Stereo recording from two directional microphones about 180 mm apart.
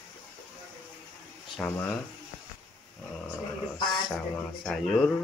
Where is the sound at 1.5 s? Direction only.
5° left (ahead or behind).